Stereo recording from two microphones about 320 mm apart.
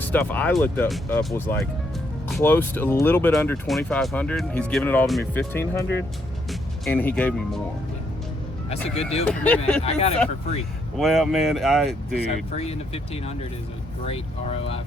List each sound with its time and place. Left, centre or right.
0.1 s speech: centre
8.7 s speech: centre
9.4 s speech: centre
9.8 s speech: centre
10.9 s speech: centre
12.5 s speech: centre